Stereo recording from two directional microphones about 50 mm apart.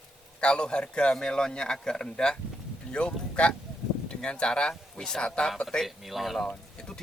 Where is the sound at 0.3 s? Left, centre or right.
Centre.